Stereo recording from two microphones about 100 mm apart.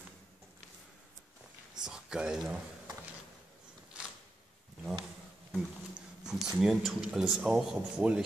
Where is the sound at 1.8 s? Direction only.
5° right (ahead or behind).